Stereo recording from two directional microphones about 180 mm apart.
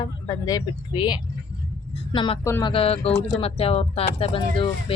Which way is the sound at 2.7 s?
35° left (ahead or behind).